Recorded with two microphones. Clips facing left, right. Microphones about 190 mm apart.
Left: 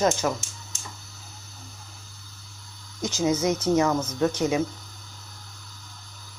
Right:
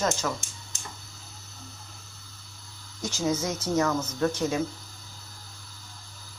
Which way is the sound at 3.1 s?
20° left (ahead or behind).